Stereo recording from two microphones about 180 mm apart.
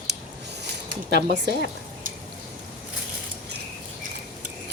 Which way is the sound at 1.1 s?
65° right (ahead or behind).